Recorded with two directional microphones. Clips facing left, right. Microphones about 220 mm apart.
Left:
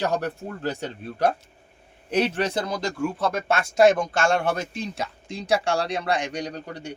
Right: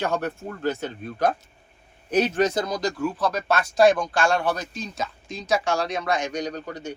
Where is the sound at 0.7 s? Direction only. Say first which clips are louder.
Right 2 dB; 30° left (ahead or behind).